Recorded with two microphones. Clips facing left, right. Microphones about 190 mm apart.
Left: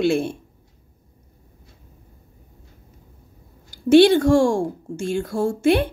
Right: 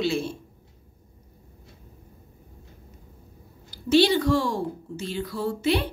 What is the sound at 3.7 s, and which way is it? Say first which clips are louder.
A woman's voice: left 7 dB; 50° left (ahead or behind).